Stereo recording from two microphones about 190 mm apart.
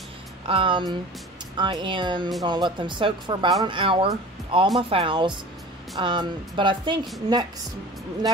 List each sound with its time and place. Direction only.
0.5 s speech: 25° right (ahead or behind)